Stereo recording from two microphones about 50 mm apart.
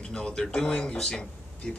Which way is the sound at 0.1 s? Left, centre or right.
Centre.